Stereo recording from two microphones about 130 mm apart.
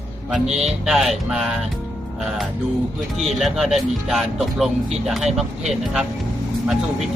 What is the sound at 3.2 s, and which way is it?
Speech, centre (ahead or behind).